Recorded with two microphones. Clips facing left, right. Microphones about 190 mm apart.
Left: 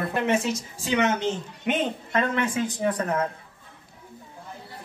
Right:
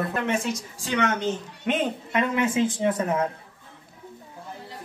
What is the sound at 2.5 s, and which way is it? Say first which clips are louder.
Speech: right 3 dB; 25° right (ahead or behind).